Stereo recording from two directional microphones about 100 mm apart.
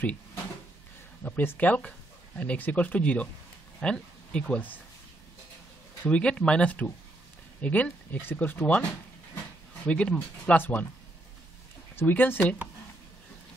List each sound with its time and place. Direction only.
1.2 s speech: 20° left (ahead or behind)
6.0 s speech: 10° left (ahead or behind)
9.8 s speech: 10° left (ahead or behind)
11.9 s speech: 20° left (ahead or behind)